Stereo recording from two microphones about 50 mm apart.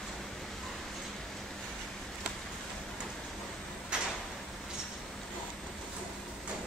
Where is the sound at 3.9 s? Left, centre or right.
Centre.